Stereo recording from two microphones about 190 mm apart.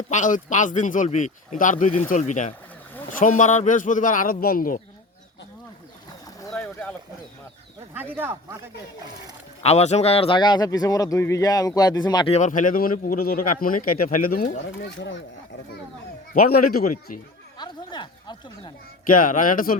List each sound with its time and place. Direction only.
0.1 s speech: 40° left (ahead or behind)
6.1 s boat: 20° left (ahead or behind)
6.5 s boat: 5° left (ahead or behind)
7.9 s speech: 10° right (ahead or behind)
9.6 s a man's voice: 35° left (ahead or behind)
12.4 s speech: 45° left (ahead or behind)
14.8 s speech: 70° left (ahead or behind)
16.3 s speech: 50° left (ahead or behind)
17.6 s a sound: 25° left (ahead or behind)
19.0 s speech: 45° left (ahead or behind)